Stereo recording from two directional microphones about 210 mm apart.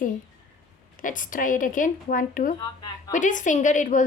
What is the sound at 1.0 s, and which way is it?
A woman's voice, 40° left (ahead or behind).